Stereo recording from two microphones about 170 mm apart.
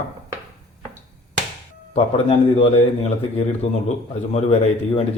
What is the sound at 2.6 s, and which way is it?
Speech, 35° left (ahead or behind).